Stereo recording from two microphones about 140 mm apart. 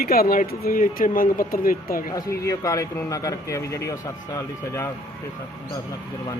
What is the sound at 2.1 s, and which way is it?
Speech, 25° left (ahead or behind).